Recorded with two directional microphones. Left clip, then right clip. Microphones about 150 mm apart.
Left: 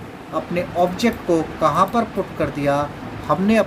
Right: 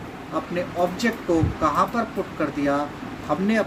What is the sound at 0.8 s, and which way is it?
Speech, 30° left (ahead or behind).